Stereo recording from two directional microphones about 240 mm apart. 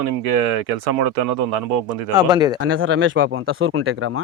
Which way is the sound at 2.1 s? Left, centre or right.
Centre.